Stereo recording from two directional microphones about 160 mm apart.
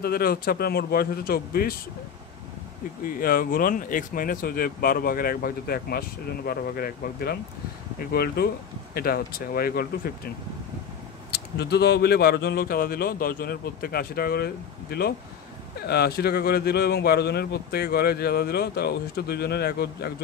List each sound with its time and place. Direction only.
0.0 s speech: 75° left (ahead or behind)
3.2 s speech: 65° left (ahead or behind)
11.3 s a man's voice: 90° left